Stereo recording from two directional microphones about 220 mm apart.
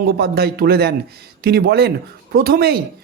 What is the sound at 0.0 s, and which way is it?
Speech, 45° right (ahead or behind).